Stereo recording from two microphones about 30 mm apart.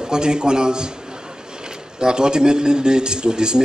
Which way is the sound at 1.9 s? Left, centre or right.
Right.